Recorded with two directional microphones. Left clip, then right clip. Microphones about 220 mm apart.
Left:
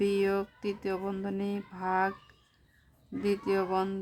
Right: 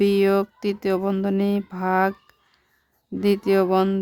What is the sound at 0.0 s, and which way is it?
Speech, 50° right (ahead or behind).